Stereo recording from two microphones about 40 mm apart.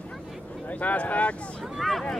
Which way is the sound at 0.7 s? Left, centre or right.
Left.